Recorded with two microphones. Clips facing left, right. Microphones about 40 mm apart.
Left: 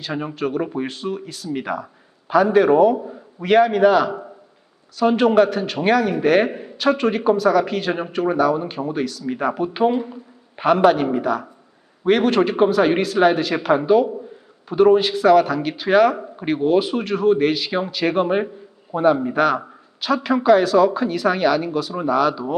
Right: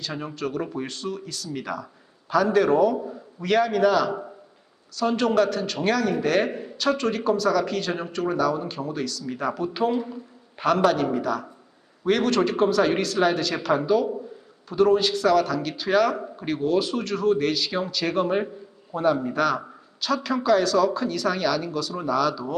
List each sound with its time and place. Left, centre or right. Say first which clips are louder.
0.0 s a man's voice: left 5 dB; centre